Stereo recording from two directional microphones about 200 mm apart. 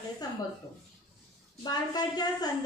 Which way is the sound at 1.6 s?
20° left (ahead or behind).